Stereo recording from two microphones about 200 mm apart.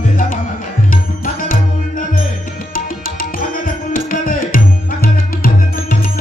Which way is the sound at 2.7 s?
45° left (ahead or behind).